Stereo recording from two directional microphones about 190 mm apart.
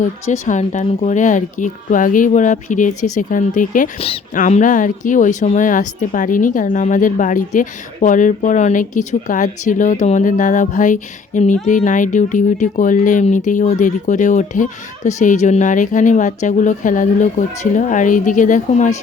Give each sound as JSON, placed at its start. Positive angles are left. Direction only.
{"t": 0.0, "sound": "a woman's voice", "side_deg": 40}